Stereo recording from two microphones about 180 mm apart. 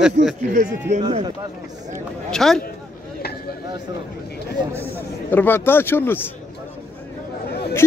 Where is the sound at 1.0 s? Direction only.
25° right (ahead or behind).